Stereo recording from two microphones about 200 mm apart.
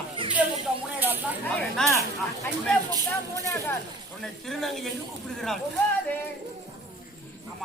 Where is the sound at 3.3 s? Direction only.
15° left (ahead or behind).